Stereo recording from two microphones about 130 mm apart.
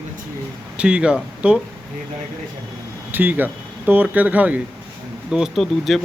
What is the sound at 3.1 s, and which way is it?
Speech, 15° right (ahead or behind).